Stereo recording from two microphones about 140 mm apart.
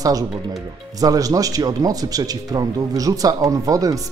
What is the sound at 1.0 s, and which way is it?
Speech, 25° right (ahead or behind).